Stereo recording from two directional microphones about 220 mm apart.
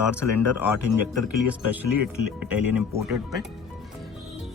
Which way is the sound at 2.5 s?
5° right (ahead or behind).